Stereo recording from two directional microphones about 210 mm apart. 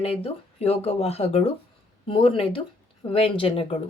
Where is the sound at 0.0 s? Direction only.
30° left (ahead or behind).